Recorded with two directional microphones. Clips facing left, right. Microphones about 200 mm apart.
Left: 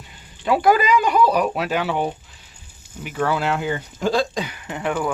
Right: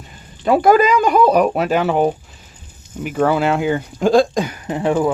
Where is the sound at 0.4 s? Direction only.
45° right (ahead or behind).